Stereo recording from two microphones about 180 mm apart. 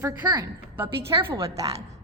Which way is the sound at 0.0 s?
20° right (ahead or behind).